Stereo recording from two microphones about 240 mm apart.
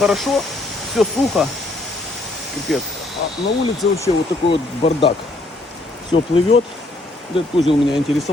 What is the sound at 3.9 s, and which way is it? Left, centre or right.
Speech, centre.